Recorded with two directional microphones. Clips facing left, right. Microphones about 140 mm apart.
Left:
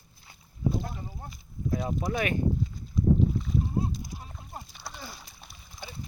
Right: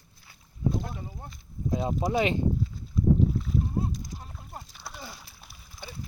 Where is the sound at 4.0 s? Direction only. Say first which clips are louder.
Even; 10° left (ahead or behind).